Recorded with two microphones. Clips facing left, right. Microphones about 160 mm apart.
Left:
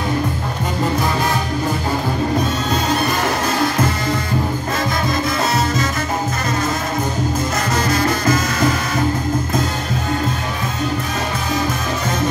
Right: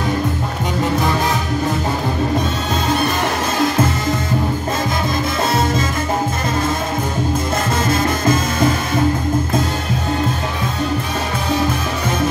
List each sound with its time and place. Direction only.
7.8 s music: 25° right (ahead or behind)